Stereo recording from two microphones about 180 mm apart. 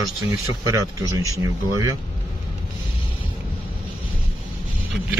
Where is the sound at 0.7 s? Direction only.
20° right (ahead or behind).